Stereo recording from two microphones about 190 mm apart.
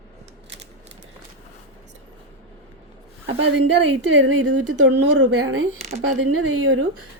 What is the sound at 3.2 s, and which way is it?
Speech, 70° right (ahead or behind).